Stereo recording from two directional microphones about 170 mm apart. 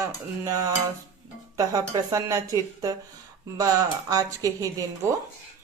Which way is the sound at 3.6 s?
20° right (ahead or behind).